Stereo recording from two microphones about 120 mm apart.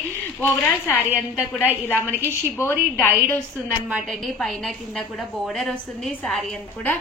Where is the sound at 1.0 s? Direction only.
15° right (ahead or behind).